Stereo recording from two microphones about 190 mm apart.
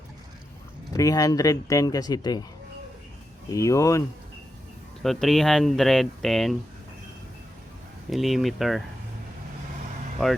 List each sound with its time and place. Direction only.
0.9 s speech: 20° left (ahead or behind)
3.5 s speech: 15° left (ahead or behind)
5.0 s speech: centre (ahead or behind)
8.1 s speech: centre (ahead or behind)